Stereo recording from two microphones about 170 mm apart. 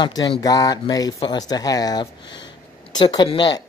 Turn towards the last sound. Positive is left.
turn(degrees=25)  # may be behind; listen again after turning